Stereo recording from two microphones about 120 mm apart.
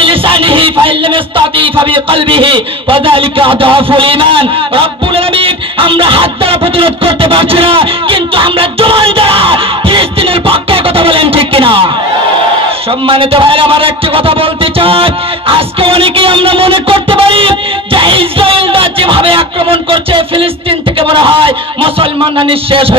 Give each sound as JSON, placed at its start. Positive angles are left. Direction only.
{"t": 0.0, "sound": "music", "side_deg": -45}
{"t": 13.0, "sound": "a man's voice", "side_deg": -50}